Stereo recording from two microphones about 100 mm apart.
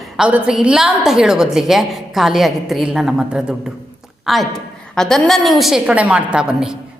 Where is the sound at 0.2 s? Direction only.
10° right (ahead or behind).